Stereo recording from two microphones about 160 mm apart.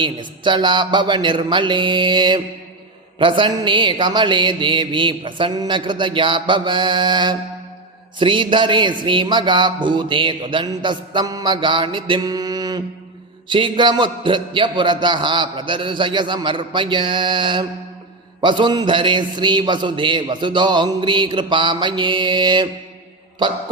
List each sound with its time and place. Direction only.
0.0 s a man's voice: 30° right (ahead or behind)